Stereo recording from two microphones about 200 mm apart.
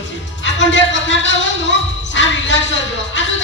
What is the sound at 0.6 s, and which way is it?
Music, 65° left (ahead or behind).